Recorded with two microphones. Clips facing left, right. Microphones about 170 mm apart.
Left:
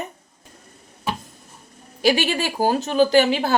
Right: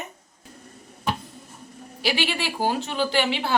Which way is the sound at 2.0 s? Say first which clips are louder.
Left 6 dB; 45° left (ahead or behind).